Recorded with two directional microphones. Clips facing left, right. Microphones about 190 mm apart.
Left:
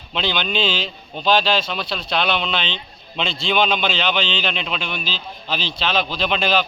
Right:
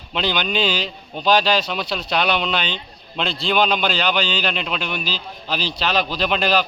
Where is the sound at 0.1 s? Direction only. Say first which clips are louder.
Right 1 dB; 10° right (ahead or behind).